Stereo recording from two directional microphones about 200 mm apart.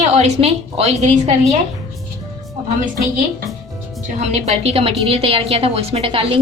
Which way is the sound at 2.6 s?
45° right (ahead or behind).